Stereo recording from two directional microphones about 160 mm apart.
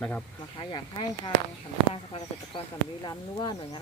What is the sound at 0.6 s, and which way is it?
Speech, 30° left (ahead or behind).